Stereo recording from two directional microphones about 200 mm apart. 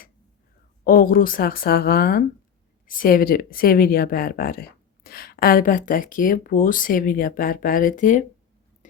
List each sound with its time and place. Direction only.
0.9 s speech: 45° left (ahead or behind)